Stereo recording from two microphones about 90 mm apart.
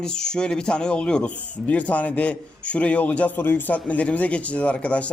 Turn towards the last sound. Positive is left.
turn(degrees=15)  # may be behind; listen again after turning